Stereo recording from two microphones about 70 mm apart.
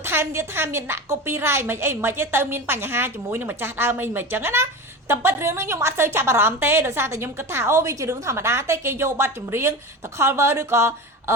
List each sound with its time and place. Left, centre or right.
0.0 s a woman's voice: right